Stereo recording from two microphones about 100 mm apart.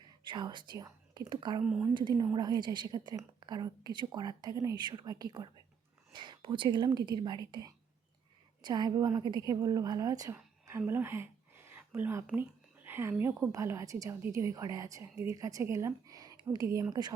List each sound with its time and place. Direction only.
0.3 s a woman's voice: 50° right (ahead or behind)
10.3 s a sound: 25° right (ahead or behind)
12.4 s a woman's voice: 20° right (ahead or behind); by 17.2 s 40° right (ahead or behind)